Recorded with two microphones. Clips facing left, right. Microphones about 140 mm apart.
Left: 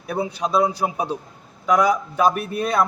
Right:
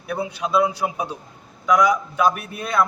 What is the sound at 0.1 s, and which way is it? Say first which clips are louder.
A man's voice: even; 35° left (ahead or behind).